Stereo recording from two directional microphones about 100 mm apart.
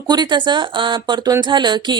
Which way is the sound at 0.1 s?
50° right (ahead or behind).